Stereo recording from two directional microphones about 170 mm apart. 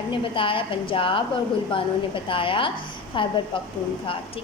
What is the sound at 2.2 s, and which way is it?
A woman's voice, 30° left (ahead or behind).